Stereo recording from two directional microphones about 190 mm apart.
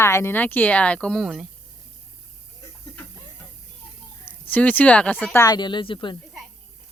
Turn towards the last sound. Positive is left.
turn(degrees=25)  # may be behind; listen again after turning